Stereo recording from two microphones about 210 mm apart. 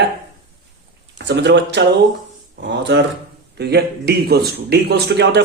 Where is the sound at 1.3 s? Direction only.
55° right (ahead or behind).